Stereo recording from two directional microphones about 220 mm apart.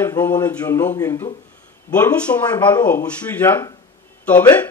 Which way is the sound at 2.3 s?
15° left (ahead or behind).